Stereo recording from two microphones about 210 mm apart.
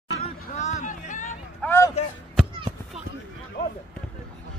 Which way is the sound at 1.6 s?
10° left (ahead or behind).